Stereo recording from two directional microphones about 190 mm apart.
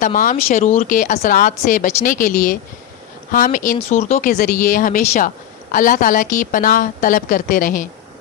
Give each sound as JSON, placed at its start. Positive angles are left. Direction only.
{"t": 0.0, "sound": "speech", "side_deg": 45}